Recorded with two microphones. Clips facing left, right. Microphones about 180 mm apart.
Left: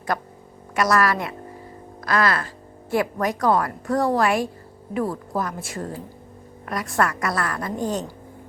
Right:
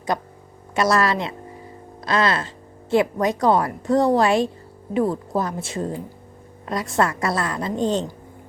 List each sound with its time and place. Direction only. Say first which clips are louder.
0.1 s a woman's voice: right 1 dB; 20° right (ahead or behind)